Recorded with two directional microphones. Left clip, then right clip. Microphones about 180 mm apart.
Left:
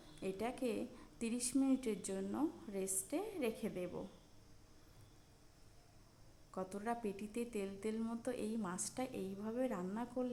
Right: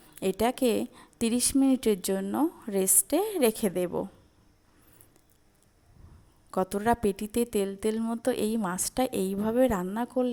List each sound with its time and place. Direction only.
0.2 s a woman's voice: 45° right (ahead or behind)
6.5 s a woman's voice: 45° right (ahead or behind)